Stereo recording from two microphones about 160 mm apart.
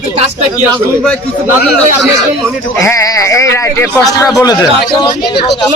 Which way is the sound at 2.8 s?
20° left (ahead or behind).